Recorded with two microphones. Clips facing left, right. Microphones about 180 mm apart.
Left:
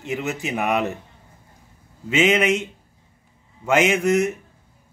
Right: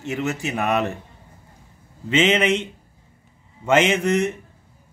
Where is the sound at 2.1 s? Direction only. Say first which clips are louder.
Even; 10° left (ahead or behind).